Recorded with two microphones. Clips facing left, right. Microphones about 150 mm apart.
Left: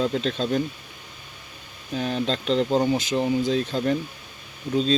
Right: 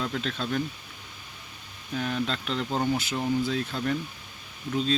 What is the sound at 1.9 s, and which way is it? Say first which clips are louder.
Speech: left 4 dB; 25° left (ahead or behind).